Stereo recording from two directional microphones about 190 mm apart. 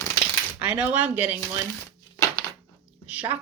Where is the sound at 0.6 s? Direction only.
5° right (ahead or behind).